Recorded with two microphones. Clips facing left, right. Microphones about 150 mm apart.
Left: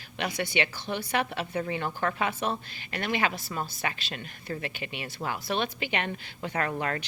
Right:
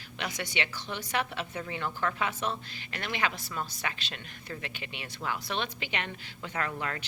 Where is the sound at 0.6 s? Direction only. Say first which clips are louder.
Left 4 dB; 55° left (ahead or behind).